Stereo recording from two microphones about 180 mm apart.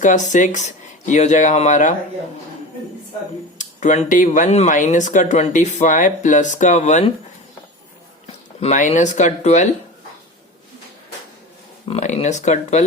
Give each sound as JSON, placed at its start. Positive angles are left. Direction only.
{"t": 0.0, "sound": "speech", "side_deg": 45}
{"t": 3.6, "sound": "speech", "side_deg": 45}
{"t": 8.6, "sound": "speech", "side_deg": 40}
{"t": 11.9, "sound": "speech", "side_deg": 40}